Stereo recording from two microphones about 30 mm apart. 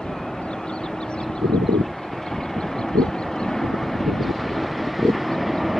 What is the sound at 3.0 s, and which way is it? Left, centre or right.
Vehicle, left.